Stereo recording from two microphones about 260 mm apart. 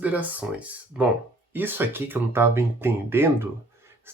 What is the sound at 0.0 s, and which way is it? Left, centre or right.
Speech, centre.